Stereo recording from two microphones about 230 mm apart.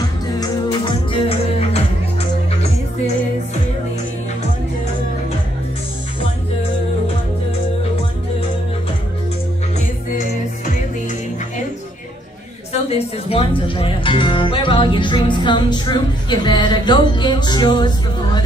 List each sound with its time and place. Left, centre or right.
0.4 s music: centre
12.9 s speech: left